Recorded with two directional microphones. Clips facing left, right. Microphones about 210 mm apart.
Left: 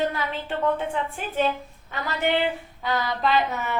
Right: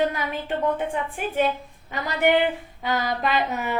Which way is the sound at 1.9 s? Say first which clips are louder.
Right 4 dB; 15° right (ahead or behind).